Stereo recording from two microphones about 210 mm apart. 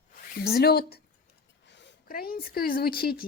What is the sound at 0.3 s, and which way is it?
Speech, 50° left (ahead or behind).